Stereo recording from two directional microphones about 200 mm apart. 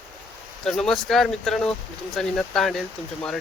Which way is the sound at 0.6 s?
Centre (ahead or behind).